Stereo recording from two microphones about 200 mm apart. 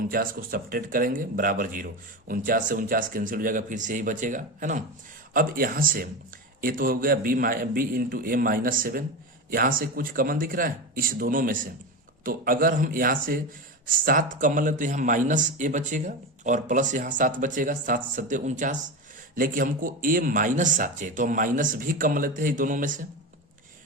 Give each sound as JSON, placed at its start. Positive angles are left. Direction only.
{"t": 0.1, "sound": "a man's voice", "side_deg": -45}